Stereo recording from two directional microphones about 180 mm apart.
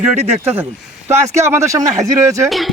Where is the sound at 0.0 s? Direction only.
10° right (ahead or behind).